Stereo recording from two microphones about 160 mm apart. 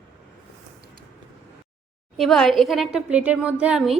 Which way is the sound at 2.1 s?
Centre (ahead or behind).